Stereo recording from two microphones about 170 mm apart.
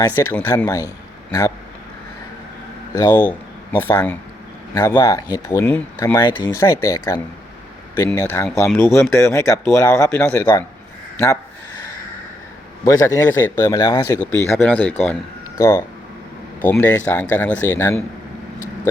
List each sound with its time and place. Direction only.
0.0 s speech: 15° left (ahead or behind)
3.0 s speech: 15° left (ahead or behind)
6.2 s speech: 25° left (ahead or behind)
6.5 s speech: 15° left (ahead or behind)
8.4 s speech: centre (ahead or behind)
8.8 s speech: 15° left (ahead or behind)
12.8 s speech: 20° left (ahead or behind)
14.2 s speech: 5° left (ahead or behind)